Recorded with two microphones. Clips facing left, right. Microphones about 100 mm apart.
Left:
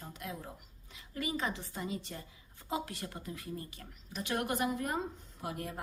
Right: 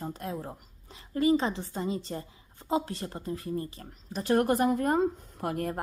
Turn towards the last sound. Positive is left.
turn(degrees=-55)  # may be behind; listen again after turning